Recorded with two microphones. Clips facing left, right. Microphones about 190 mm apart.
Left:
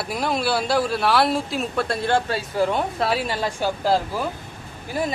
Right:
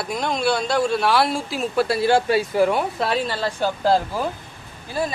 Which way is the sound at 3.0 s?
5° left (ahead or behind).